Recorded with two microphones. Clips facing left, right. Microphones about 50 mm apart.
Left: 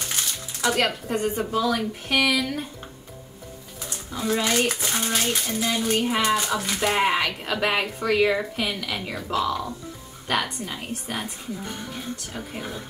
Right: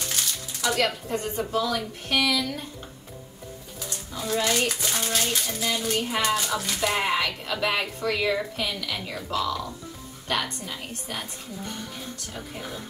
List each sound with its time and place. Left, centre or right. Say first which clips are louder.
0.1 s a sound: left 1 dB; left
1.4 s speech: left 3 dB; centre
4.1 s speech: left 2 dB; left